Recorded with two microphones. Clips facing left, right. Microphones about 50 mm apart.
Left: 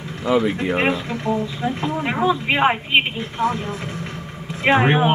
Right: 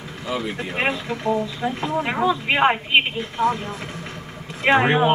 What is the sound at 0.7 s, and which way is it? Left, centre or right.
Speech, centre.